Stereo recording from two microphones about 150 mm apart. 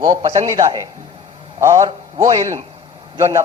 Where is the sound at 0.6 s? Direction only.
25° right (ahead or behind).